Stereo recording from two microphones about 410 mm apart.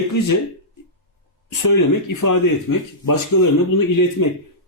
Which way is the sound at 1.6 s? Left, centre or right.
Left.